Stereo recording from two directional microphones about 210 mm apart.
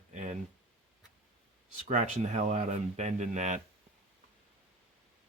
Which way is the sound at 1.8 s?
30° right (ahead or behind).